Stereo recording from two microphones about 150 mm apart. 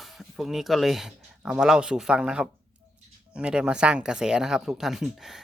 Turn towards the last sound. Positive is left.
turn(degrees=-5)  # may be behind; listen again after turning